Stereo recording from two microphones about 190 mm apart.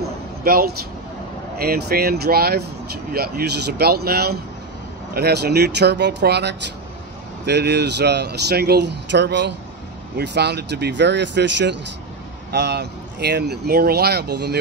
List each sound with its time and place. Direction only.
0.4 s speech: 50° right (ahead or behind)